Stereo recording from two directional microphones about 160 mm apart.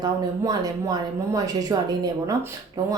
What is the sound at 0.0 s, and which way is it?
Speech, 25° right (ahead or behind).